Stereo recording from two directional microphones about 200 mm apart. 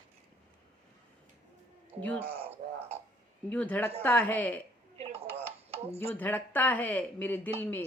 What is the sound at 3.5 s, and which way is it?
Speech, 5° left (ahead or behind).